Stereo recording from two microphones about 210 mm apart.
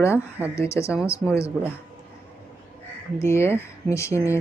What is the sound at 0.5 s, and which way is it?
Speech, 15° left (ahead or behind).